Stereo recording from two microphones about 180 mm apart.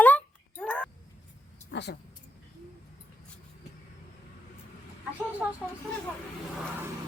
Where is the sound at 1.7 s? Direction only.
70° left (ahead or behind).